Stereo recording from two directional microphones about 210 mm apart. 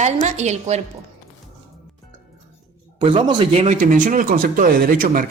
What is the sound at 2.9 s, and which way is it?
Speech, 25° right (ahead or behind).